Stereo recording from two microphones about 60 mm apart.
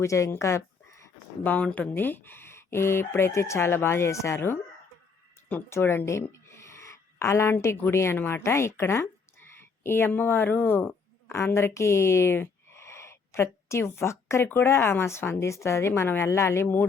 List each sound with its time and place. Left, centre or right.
0.0 s speech: left
1.5 s speech: left
1.9 s speech: left
5.6 s speech: left
6.1 s a sound: left
7.6 s speech: left
11.3 s speech: left
14.4 s speech: left